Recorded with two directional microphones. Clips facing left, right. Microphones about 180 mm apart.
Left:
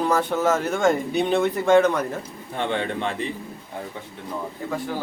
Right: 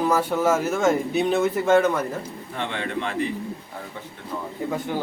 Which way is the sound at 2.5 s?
35° left (ahead or behind).